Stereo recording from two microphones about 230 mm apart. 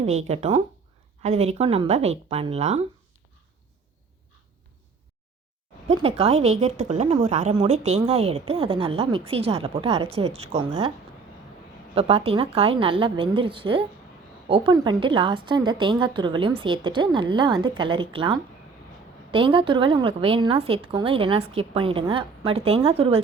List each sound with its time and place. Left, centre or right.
0.0 s a woman's voice: right
5.9 s a woman's voice: right
11.9 s a woman's voice: right